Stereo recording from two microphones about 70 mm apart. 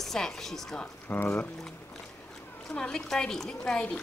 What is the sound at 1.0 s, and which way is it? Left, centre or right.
Speech, left.